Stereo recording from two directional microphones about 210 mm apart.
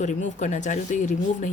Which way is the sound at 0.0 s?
35° left (ahead or behind).